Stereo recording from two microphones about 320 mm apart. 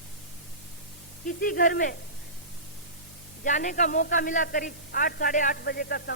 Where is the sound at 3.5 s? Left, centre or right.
Left.